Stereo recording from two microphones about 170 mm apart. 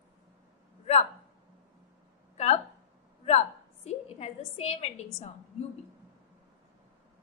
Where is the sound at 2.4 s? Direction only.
40° left (ahead or behind).